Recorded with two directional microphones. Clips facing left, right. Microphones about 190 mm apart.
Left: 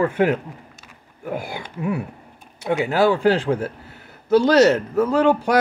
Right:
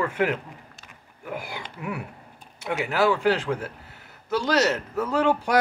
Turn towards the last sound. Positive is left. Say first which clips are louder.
# left 6 dB
turn(degrees=30)  # may be behind; listen again after turning